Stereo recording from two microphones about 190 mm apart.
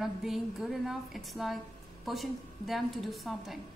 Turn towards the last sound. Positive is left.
turn(degrees=0)  # may be behind; listen again after turning